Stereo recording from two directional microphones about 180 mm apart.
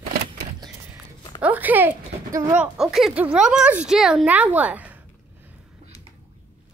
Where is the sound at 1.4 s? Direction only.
10° right (ahead or behind).